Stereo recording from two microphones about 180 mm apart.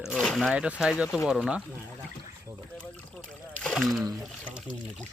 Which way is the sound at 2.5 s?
15° right (ahead or behind).